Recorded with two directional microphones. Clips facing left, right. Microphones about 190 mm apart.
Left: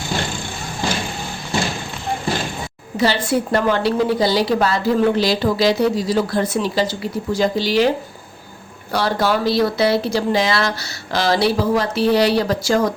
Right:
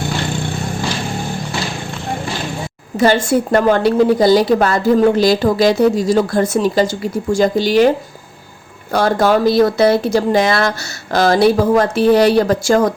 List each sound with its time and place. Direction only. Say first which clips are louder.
3.0 s a woman's voice: right 5 dB; 45° right (ahead or behind)
8.9 s a woman's voice: right 5 dB; 50° right (ahead or behind)